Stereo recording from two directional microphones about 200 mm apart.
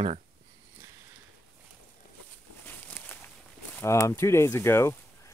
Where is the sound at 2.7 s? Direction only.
10° left (ahead or behind).